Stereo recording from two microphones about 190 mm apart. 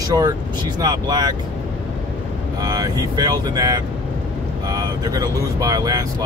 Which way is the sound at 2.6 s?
20° right (ahead or behind).